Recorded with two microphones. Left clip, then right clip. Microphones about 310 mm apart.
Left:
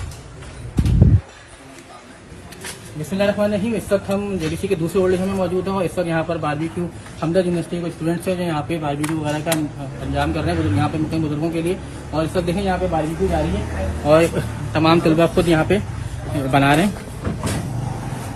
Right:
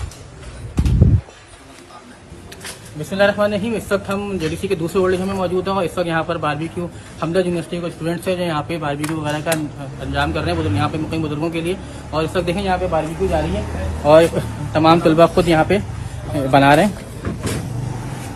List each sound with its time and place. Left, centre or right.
2.6 s speech: centre
14.7 s a man's voice: right
14.9 s speech: centre
16.5 s speech: right